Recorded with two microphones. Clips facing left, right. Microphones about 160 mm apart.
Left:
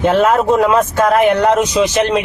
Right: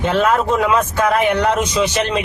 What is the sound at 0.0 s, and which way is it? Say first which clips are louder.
A man's voice: left 4 dB; 45° left (ahead or behind).